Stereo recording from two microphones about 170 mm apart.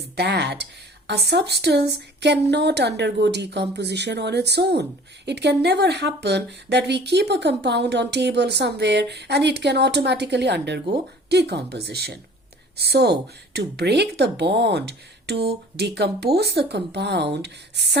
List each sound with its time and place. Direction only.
0.2 s speech: 80° right